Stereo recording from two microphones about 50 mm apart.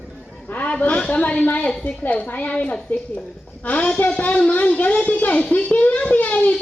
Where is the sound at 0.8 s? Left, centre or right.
Left.